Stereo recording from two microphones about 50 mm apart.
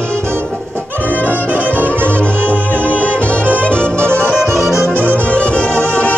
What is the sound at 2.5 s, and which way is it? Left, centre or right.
Music, left.